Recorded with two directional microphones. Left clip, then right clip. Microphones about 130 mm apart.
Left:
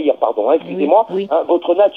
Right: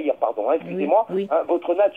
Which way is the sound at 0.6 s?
10° right (ahead or behind).